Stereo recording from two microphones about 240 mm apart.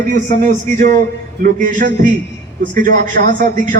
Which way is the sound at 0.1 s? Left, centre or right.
Right.